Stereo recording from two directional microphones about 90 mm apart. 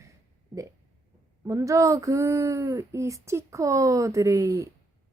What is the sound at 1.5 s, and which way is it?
Speech, 35° right (ahead or behind).